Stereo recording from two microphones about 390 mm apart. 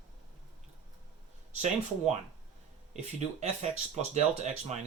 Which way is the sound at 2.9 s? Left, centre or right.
Centre.